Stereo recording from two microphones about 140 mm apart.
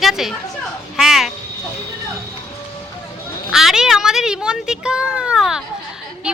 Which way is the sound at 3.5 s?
5° right (ahead or behind).